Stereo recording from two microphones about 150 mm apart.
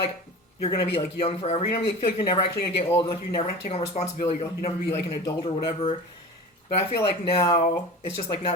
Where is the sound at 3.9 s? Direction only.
45° left (ahead or behind).